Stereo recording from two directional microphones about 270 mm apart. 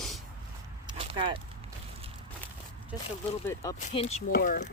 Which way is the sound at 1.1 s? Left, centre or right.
Centre.